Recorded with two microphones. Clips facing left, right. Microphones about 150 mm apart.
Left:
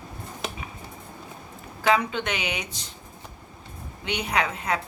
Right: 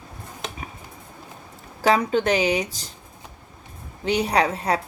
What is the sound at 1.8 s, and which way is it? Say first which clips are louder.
A woman's voice: right 4 dB; 40° right (ahead or behind).